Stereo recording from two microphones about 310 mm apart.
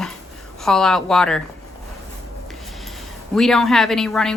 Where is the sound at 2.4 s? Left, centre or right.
Centre.